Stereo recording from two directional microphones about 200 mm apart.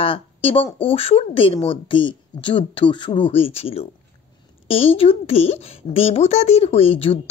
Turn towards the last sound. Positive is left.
turn(degrees=30)  # may be behind; listen again after turning